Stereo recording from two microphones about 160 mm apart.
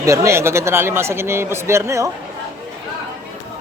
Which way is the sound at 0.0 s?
20° right (ahead or behind).